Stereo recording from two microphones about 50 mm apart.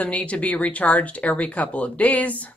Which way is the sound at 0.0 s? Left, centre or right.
Left.